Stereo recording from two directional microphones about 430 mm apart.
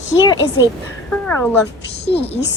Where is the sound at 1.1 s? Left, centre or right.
Centre.